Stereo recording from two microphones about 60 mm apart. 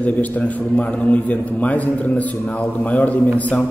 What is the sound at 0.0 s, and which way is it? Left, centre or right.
A man's voice, left.